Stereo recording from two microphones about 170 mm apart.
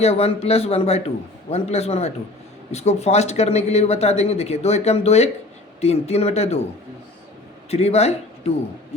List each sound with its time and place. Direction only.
0.0 s speech: 40° left (ahead or behind)
7.7 s a man's voice: 35° left (ahead or behind)